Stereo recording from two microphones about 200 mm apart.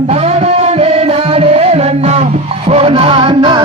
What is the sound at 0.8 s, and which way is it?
Music, 30° right (ahead or behind).